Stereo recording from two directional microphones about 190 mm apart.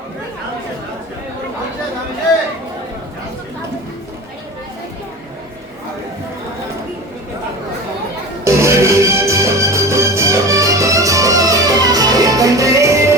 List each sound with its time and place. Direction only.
8.4 s music: 15° right (ahead or behind)